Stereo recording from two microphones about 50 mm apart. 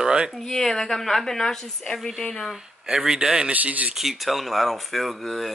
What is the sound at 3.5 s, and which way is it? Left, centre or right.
Speech, right.